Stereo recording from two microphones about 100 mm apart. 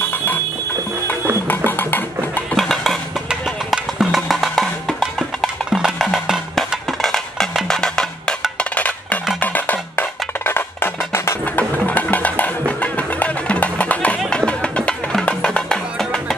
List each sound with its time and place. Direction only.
1.5 s music: 20° left (ahead or behind)
2.5 s music: 5° left (ahead or behind)
6.9 s music: 5° left (ahead or behind)